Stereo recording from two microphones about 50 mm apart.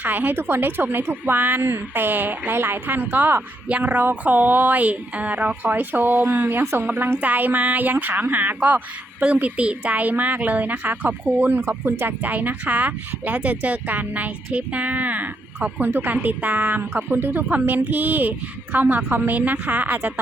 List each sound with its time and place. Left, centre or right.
0.0 s a woman's voice: right
3.7 s a woman's voice: right
16.9 s a woman's voice: right
17.5 s speech: right